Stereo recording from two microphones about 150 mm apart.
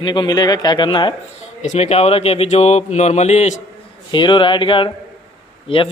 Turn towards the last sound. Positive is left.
turn(degrees=35)  # may be behind; listen again after turning